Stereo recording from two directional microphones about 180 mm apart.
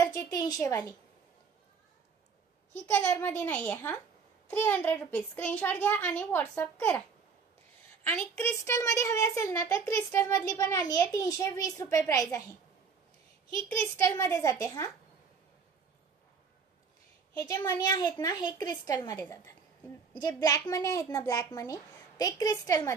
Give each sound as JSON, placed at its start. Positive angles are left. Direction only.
{"t": 0.0, "sound": "speech", "side_deg": 20}
{"t": 2.7, "sound": "a woman's voice", "side_deg": 15}
{"t": 8.0, "sound": "a woman's voice", "side_deg": 15}
{"t": 13.7, "sound": "a woman's voice", "side_deg": 15}
{"t": 17.4, "sound": "a woman's voice", "side_deg": 20}